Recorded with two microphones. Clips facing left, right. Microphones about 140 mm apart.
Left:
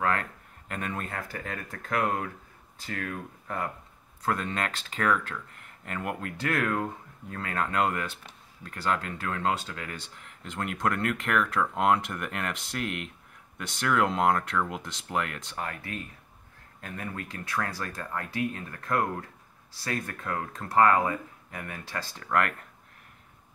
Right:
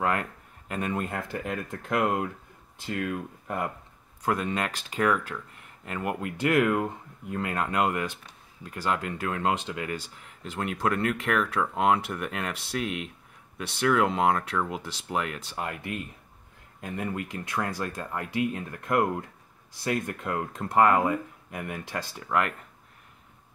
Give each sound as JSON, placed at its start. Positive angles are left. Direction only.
{"t": 0.0, "sound": "speech", "side_deg": -10}